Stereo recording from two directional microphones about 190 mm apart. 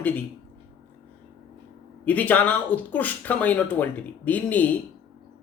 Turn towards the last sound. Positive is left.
turn(degrees=10)  # may be behind; listen again after turning